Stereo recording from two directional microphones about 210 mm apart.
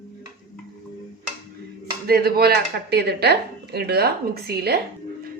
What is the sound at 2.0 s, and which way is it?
Speech, 45° right (ahead or behind).